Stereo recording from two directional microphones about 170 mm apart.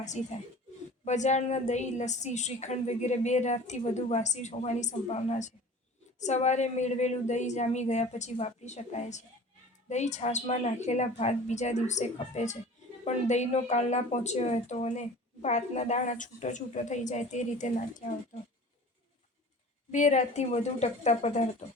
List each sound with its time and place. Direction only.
0.0 s a woman's voice: 45° left (ahead or behind)
19.9 s a woman's voice: 45° left (ahead or behind)